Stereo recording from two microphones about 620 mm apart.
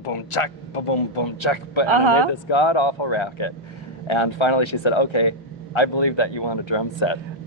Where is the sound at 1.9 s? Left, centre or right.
Right.